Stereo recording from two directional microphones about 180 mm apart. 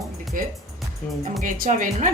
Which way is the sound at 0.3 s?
50° right (ahead or behind).